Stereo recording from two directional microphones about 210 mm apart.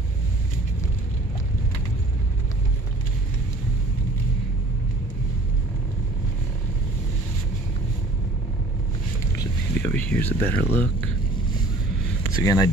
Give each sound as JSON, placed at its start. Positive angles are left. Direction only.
{"t": 9.4, "sound": "a sound", "side_deg": 10}
{"t": 10.4, "sound": "speech", "side_deg": -25}
{"t": 12.4, "sound": "speech", "side_deg": 20}